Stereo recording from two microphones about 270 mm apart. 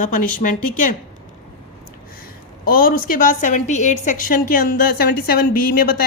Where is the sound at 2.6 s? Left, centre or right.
Left.